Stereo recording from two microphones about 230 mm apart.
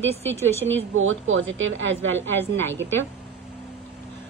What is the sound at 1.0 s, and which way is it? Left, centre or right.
A woman's voice, right.